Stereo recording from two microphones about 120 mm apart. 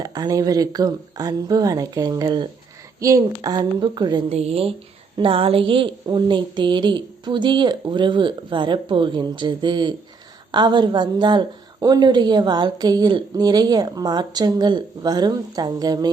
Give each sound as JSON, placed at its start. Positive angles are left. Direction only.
{"t": 0.0, "sound": "a woman's voice", "side_deg": -30}
{"t": 4.3, "sound": "a woman's voice", "side_deg": -60}